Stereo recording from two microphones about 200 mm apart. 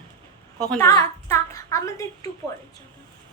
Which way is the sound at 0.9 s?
15° left (ahead or behind).